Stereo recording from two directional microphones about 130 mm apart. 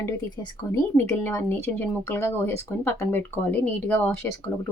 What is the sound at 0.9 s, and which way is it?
A woman's voice, 20° left (ahead or behind).